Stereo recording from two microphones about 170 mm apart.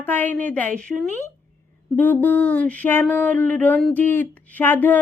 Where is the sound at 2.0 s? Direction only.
10° left (ahead or behind).